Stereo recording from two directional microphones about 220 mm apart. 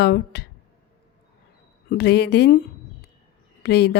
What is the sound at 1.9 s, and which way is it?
Speech, 50° left (ahead or behind).